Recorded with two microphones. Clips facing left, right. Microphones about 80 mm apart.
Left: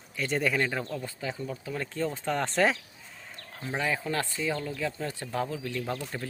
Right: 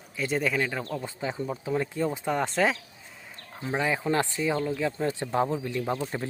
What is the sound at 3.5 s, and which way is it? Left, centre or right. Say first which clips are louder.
Speech: right 3 dB; centre.